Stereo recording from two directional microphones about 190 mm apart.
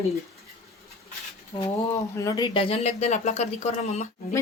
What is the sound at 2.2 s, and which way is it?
Speech, 20° left (ahead or behind).